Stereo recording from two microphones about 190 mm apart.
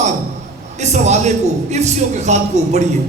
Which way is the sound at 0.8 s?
35° right (ahead or behind).